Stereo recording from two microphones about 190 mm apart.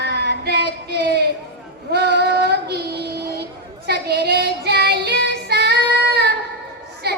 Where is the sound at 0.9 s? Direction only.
60° right (ahead or behind).